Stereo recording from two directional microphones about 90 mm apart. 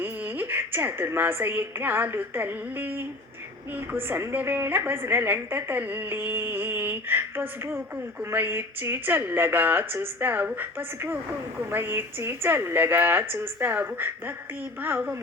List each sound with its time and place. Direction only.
0.0 s a woman's voice: 25° right (ahead or behind)